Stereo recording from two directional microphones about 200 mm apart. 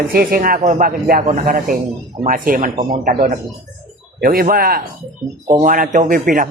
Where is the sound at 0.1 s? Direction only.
45° right (ahead or behind).